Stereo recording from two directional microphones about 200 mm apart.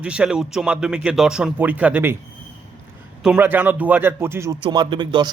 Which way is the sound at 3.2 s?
10° right (ahead or behind).